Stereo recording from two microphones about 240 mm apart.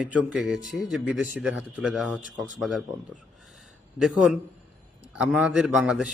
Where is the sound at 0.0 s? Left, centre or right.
Centre.